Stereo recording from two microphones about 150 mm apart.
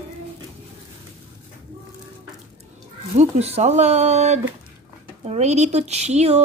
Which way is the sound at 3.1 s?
45° right (ahead or behind).